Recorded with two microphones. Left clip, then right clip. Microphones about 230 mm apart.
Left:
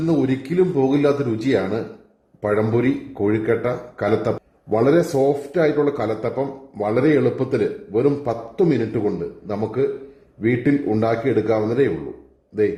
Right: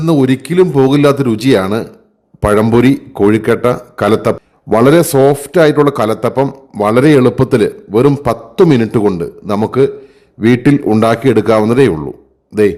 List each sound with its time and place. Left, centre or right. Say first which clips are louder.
0.1 s a man's voice: right 11 dB; right